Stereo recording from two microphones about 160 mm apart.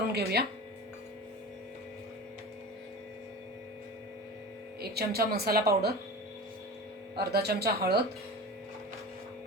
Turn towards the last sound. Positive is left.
turn(degrees=-80)